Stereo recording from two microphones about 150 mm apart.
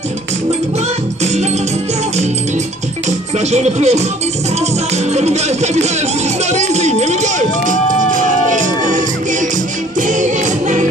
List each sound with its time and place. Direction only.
3.1 s music: 50° right (ahead or behind)